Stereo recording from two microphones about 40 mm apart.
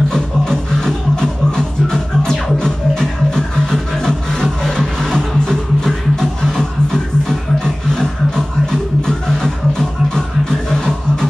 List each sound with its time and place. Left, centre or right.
0.1 s music: centre